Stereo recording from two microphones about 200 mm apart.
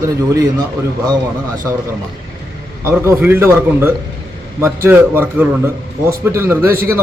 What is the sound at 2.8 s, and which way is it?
Speech, 10° right (ahead or behind).